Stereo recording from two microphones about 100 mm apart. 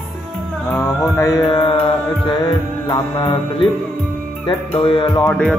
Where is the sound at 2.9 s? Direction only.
50° left (ahead or behind).